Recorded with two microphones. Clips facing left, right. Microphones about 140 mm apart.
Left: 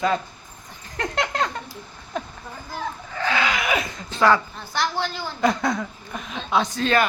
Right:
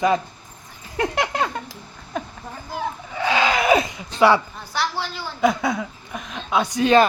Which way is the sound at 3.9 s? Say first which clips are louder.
Right 2 dB; 15° right (ahead or behind).